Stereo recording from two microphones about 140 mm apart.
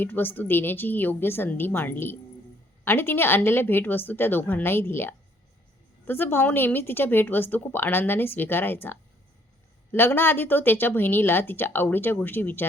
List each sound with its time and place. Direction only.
0.0 s a woman's voice: 15° left (ahead or behind)